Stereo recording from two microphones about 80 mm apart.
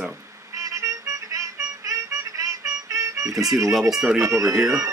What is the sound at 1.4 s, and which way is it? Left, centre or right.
Music, right.